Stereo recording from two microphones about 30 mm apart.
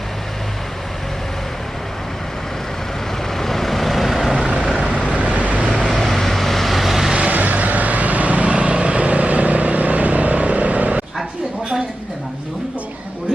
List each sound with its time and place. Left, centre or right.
3.3 s vehicle: centre
4.3 s vehicle: right
5.1 s vehicle: right
5.9 s vehicle: centre
7.3 s vehicle: right